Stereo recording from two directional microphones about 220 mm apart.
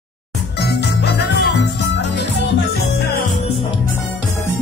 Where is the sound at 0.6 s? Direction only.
50° left (ahead or behind).